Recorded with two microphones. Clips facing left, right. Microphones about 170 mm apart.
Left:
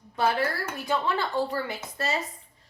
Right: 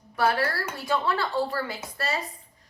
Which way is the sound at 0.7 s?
20° left (ahead or behind).